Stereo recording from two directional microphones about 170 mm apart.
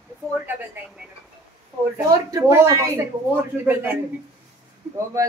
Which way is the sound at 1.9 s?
20° right (ahead or behind).